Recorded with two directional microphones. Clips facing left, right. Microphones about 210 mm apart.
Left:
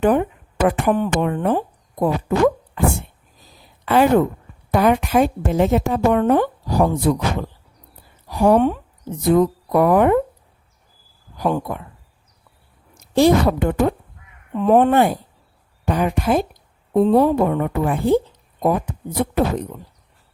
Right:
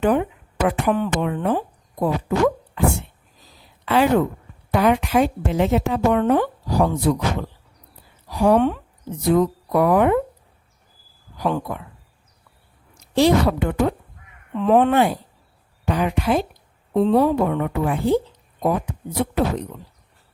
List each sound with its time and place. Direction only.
0.0 s a woman's voice: 45° left (ahead or behind)
3.8 s a woman's voice: 50° left (ahead or behind)
11.3 s a woman's voice: 45° left (ahead or behind)
12.9 s a woman's voice: 50° left (ahead or behind)
19.2 s a woman's voice: 45° left (ahead or behind)